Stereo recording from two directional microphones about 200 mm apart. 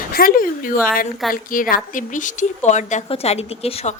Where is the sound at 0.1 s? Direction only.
45° left (ahead or behind).